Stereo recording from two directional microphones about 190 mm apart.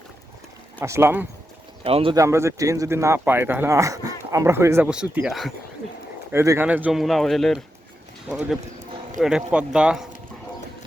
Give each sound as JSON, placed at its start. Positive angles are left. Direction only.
{"t": 0.8, "sound": "speech", "side_deg": -15}
{"t": 1.8, "sound": "speech", "side_deg": -30}
{"t": 2.1, "sound": "speech", "side_deg": -15}
{"t": 6.3, "sound": "speech", "side_deg": -15}